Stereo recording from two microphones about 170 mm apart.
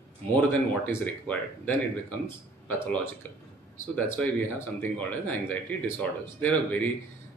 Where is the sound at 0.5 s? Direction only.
10° left (ahead or behind).